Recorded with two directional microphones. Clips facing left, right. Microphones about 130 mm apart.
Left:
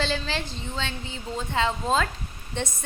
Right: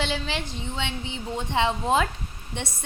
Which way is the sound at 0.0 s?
15° right (ahead or behind).